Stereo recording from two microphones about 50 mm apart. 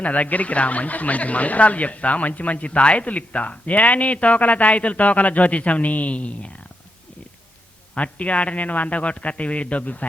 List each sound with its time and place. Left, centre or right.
0.0 s speech: left
7.9 s speech: left